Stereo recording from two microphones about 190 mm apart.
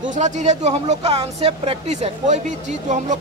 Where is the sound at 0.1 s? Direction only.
40° right (ahead or behind).